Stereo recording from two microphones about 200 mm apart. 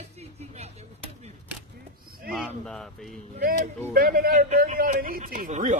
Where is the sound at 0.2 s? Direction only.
30° right (ahead or behind).